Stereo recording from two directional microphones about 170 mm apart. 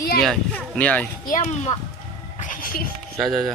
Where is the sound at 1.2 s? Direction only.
45° left (ahead or behind).